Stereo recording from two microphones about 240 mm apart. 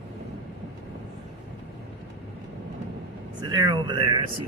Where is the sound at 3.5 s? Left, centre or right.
Centre.